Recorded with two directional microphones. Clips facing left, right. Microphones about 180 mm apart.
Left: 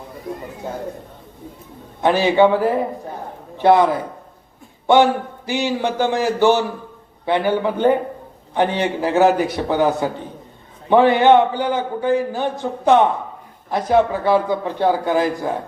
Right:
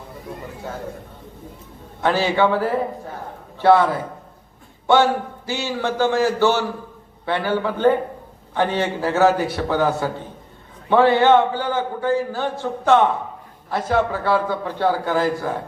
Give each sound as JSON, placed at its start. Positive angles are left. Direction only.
{"t": 2.0, "sound": "a man's voice", "side_deg": 15}
{"t": 5.5, "sound": "a man's voice", "side_deg": 15}